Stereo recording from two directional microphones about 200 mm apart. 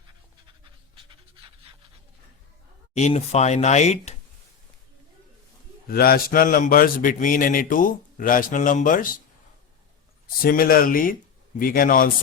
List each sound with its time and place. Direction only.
2.9 s speech: 35° left (ahead or behind)
5.9 s speech: 50° left (ahead or behind)
10.4 s speech: 45° left (ahead or behind)